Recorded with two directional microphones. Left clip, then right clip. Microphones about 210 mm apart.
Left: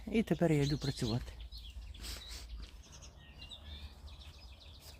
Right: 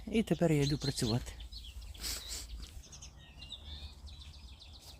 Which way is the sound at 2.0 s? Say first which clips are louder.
Right 6 dB; 35° right (ahead or behind).